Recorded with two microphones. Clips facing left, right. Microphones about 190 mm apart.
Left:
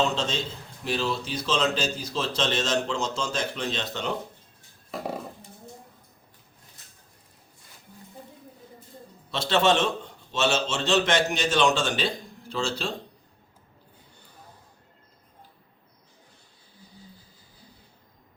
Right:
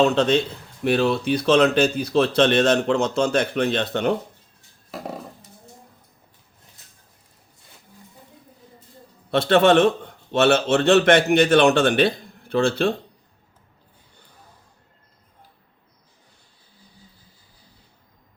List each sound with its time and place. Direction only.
0.0 s a man's voice: 60° right (ahead or behind)
4.9 s a sound: centre (ahead or behind)
9.3 s a man's voice: 55° right (ahead or behind)